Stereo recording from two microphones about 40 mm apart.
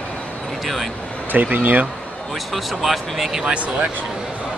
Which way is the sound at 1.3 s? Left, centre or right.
Right.